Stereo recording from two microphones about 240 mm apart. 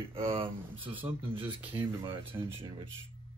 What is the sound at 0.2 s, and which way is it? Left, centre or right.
Speech, right.